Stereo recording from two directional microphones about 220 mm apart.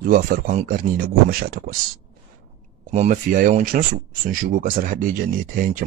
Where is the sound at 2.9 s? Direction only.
35° right (ahead or behind).